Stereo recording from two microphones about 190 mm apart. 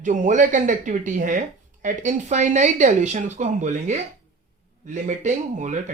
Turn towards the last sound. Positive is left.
turn(degrees=-40)  # may be behind; listen again after turning